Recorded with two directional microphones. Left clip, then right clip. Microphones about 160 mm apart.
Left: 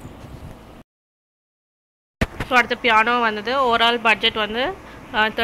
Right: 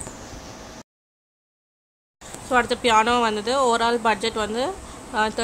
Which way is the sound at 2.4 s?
20° right (ahead or behind).